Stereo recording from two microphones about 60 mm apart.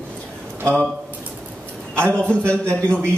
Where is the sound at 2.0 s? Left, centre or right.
Centre.